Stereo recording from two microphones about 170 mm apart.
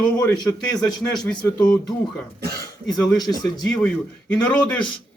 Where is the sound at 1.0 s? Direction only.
5° left (ahead or behind).